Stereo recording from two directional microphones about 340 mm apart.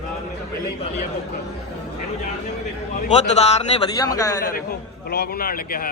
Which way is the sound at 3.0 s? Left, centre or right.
Centre.